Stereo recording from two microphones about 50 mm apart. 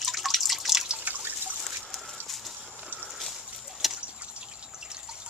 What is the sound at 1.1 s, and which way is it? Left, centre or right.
Liquid, right.